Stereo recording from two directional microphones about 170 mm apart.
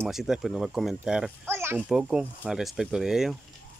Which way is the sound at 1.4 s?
15° right (ahead or behind).